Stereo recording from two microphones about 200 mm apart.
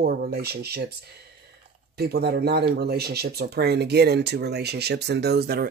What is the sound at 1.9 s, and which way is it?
Speech, 55° right (ahead or behind).